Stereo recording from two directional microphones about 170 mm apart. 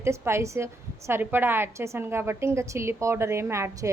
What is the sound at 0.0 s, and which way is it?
A woman's voice, 15° right (ahead or behind).